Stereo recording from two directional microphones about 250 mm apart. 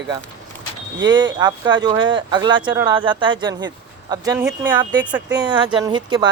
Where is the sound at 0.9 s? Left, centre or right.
Centre.